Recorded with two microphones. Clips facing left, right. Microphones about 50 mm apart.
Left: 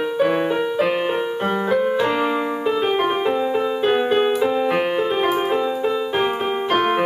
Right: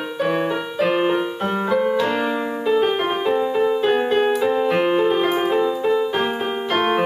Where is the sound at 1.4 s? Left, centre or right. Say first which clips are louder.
Left 2 dB; centre.